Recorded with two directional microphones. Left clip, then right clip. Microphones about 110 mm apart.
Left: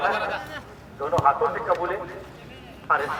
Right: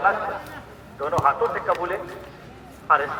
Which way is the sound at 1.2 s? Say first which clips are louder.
Even; 40° right (ahead or behind).